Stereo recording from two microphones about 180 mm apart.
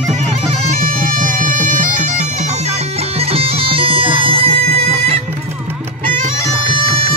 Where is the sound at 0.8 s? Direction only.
45° right (ahead or behind).